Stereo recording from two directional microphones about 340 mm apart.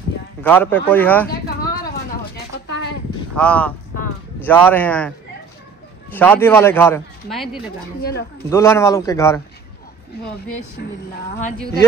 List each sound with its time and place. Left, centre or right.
0.4 s speech: centre
2.5 s a sound: left
3.3 s speech: centre
6.1 s speech: centre
8.0 s speech: left
8.5 s a man's voice: centre
10.8 s speech: left